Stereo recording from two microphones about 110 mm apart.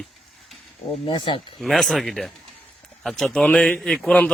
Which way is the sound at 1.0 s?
50° left (ahead or behind).